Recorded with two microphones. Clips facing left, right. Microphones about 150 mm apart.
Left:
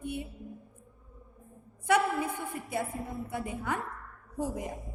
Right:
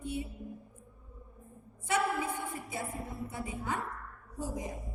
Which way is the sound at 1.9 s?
60° left (ahead or behind).